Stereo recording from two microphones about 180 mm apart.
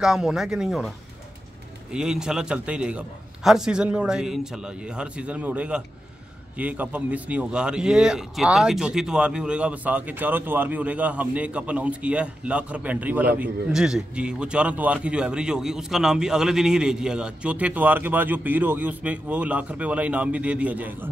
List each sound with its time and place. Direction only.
0.0 s a man's voice: 5° right (ahead or behind)